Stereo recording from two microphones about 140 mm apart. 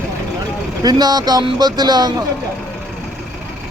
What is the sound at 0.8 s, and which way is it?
Speech, 30° right (ahead or behind).